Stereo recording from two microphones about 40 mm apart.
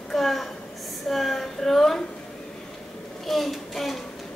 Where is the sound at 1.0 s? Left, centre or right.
Centre.